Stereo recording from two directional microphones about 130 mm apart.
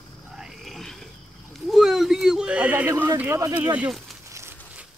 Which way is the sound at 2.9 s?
20° right (ahead or behind).